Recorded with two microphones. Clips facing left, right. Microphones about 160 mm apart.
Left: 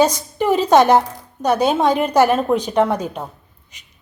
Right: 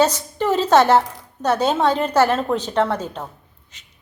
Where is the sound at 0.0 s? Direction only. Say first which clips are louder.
Left 2 dB; 15° left (ahead or behind).